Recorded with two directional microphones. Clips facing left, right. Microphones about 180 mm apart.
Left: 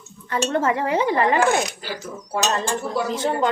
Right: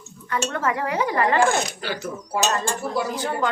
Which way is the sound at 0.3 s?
30° left (ahead or behind).